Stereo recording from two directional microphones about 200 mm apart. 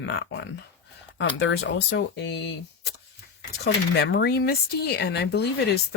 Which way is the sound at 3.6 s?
55° left (ahead or behind).